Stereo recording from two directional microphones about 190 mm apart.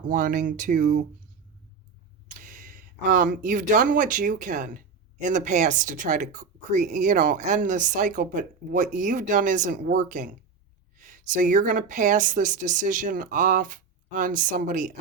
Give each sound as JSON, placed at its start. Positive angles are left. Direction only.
{"t": 0.1, "sound": "speech", "side_deg": -45}
{"t": 2.4, "sound": "speech", "side_deg": -45}